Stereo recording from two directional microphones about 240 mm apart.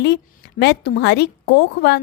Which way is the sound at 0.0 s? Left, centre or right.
Left.